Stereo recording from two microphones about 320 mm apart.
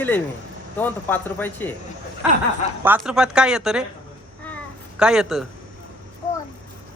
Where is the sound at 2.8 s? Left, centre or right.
Centre.